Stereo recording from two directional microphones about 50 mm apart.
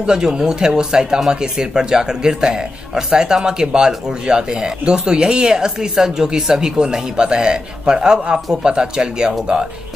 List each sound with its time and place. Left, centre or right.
0.0 s speech: centre